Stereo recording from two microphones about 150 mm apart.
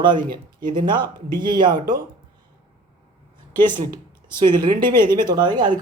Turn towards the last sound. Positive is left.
turn(degrees=-30)  # may be behind; listen again after turning